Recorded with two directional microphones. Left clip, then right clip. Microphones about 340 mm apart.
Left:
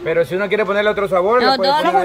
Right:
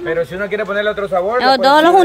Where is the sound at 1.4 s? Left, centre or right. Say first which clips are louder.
Right 4 dB; centre.